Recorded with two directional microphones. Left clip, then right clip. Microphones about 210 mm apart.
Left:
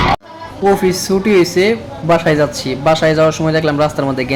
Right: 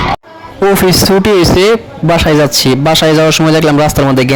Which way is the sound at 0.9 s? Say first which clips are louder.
Right 6 dB; 55° right (ahead or behind).